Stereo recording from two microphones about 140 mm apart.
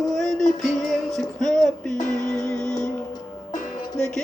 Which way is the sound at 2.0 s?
65° left (ahead or behind).